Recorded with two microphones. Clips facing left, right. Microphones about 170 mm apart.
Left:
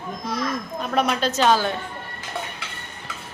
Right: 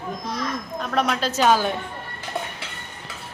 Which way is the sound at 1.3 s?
10° right (ahead or behind).